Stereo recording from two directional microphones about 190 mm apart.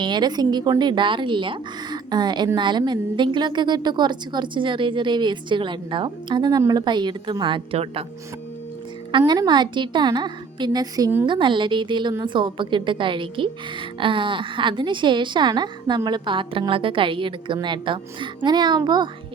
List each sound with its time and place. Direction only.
0.0 s a woman's voice: 25° right (ahead or behind)
9.1 s a woman's voice: 25° right (ahead or behind)
11.3 s a woman's voice: 25° right (ahead or behind)